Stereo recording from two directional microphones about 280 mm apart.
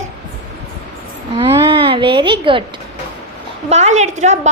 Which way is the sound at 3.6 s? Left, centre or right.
Right.